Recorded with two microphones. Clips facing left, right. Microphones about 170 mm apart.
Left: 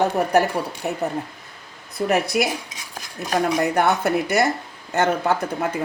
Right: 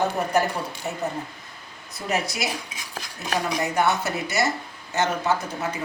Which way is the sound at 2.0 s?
60° left (ahead or behind).